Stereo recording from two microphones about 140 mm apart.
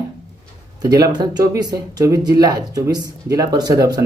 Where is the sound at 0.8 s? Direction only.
25° right (ahead or behind).